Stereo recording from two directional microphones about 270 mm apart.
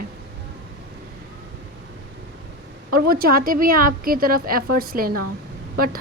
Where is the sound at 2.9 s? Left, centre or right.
Right.